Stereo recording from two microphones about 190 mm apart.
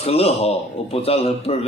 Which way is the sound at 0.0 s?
30° left (ahead or behind).